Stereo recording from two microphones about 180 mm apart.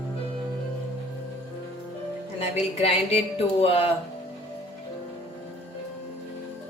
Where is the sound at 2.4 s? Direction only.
35° left (ahead or behind).